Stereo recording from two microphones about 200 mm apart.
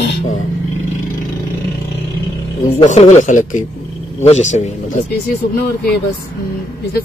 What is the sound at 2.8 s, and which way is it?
Speech, 35° left (ahead or behind).